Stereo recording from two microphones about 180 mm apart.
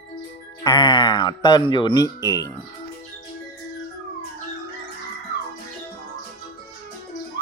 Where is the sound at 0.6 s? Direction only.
25° left (ahead or behind).